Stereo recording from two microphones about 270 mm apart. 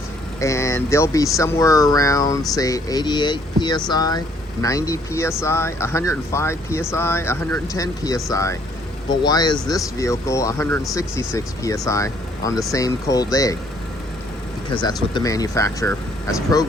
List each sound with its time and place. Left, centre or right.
0.3 s speech: centre
14.7 s speech: centre